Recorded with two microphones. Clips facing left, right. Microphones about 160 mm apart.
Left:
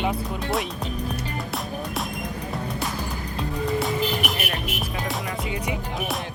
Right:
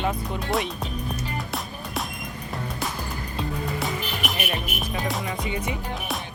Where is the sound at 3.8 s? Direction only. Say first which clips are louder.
Left 4 dB; centre (ahead or behind).